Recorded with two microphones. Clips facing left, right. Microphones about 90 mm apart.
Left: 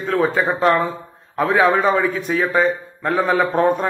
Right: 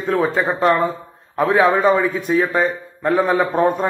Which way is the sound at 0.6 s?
5° right (ahead or behind).